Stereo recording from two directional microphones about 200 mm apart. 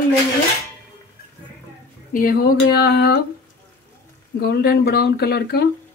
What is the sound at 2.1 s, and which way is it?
Speech, 50° left (ahead or behind).